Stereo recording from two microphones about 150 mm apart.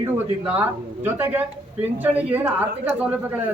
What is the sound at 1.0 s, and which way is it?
Speech, 10° right (ahead or behind).